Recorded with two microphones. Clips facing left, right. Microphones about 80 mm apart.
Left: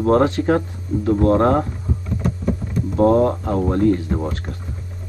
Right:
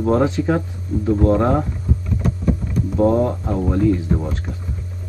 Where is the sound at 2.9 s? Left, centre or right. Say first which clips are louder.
Left 2 dB; left.